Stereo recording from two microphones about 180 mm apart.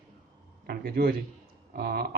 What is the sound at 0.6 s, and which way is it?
Speech, 60° right (ahead or behind).